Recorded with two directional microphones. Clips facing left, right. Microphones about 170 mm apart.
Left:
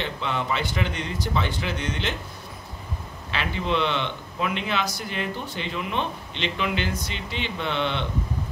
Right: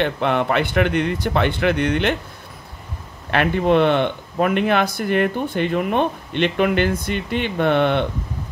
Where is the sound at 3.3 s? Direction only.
55° right (ahead or behind).